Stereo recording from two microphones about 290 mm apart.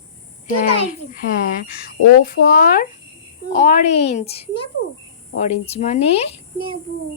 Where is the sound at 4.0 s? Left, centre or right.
Left.